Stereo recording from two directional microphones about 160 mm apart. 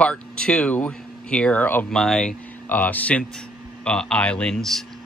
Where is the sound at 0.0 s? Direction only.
5° left (ahead or behind).